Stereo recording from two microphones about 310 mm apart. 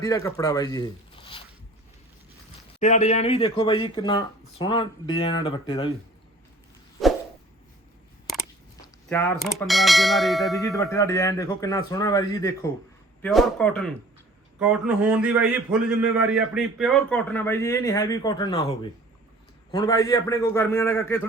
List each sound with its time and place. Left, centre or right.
0.0 s speech: centre
2.8 s speech: left
7.0 s a sound: centre
9.0 s a man's voice: centre